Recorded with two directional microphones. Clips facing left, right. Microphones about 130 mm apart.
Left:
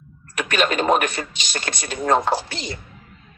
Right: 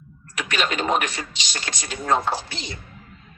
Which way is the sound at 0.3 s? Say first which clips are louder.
Left 4 dB; 50° left (ahead or behind).